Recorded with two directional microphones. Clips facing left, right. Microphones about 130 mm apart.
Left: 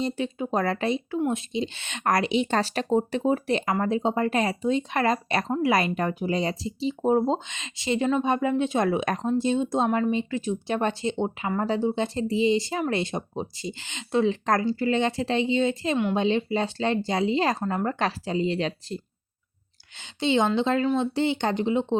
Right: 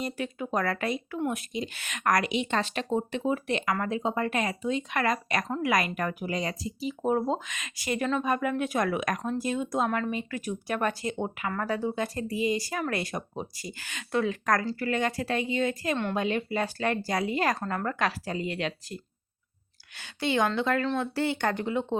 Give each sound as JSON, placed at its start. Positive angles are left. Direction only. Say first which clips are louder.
{"t": 0.0, "sound": "speech", "louder": "left 5 dB", "side_deg": 25}
{"t": 20.0, "sound": "speech", "louder": "left 3 dB", "side_deg": 20}